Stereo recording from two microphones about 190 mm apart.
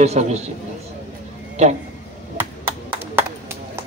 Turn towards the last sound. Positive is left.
turn(degrees=-10)  # may be behind; listen again after turning